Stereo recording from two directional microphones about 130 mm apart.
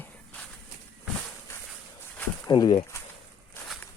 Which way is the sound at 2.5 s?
35° left (ahead or behind).